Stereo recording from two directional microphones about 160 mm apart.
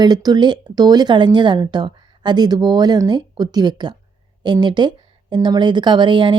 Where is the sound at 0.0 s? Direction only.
25° right (ahead or behind).